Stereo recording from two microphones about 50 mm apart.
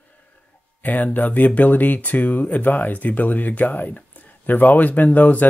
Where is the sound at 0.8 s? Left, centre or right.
Left.